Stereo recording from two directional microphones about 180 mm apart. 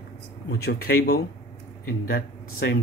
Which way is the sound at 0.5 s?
65° left (ahead or behind).